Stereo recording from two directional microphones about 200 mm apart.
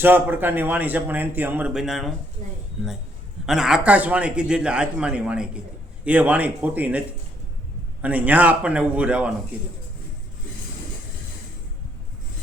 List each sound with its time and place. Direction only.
0.0 s speech: 10° right (ahead or behind)
2.4 s speech: 35° right (ahead or behind)
3.4 s a man's voice: centre (ahead or behind)
8.0 s speech: 10° right (ahead or behind)